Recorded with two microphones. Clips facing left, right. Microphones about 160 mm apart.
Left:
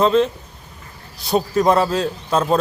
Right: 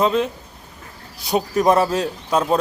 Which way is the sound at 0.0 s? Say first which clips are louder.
Left 3 dB; 10° right (ahead or behind).